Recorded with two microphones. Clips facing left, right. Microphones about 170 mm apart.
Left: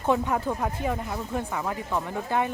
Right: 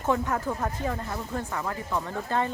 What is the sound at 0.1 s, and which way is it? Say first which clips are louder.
Speech: left 2 dB; 15° left (ahead or behind).